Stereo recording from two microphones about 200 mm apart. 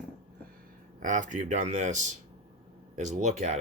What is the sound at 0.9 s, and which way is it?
A man's voice, 40° right (ahead or behind).